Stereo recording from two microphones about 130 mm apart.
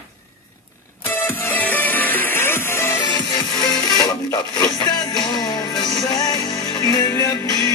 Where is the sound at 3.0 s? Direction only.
35° left (ahead or behind).